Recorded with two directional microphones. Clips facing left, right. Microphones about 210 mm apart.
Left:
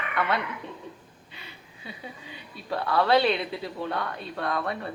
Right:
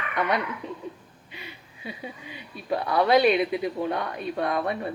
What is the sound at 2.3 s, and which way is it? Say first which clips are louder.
A woman's voice: right 4 dB; 20° right (ahead or behind).